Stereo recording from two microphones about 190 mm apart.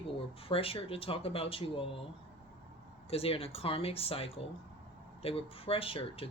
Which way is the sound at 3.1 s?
30° left (ahead or behind).